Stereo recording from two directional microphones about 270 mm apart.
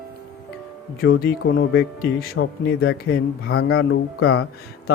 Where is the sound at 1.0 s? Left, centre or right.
Left.